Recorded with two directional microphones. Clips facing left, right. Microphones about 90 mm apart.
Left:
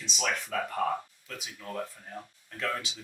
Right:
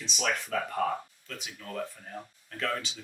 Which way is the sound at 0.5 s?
5° left (ahead or behind).